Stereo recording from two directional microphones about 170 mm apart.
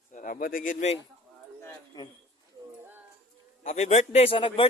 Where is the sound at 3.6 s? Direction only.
40° left (ahead or behind).